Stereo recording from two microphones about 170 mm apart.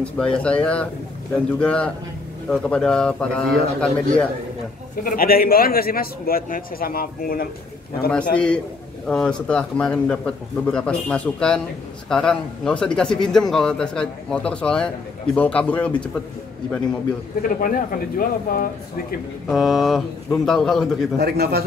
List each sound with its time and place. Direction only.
0.0 s a man's voice: 5° left (ahead or behind)
5.0 s a man's voice: 60° left (ahead or behind)
8.1 s a man's voice: 5° left (ahead or behind)
17.4 s a man's voice: 55° left (ahead or behind)
19.5 s a man's voice: centre (ahead or behind)
21.2 s speech: 70° right (ahead or behind)